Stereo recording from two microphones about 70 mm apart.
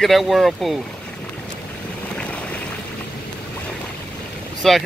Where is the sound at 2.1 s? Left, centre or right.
Centre.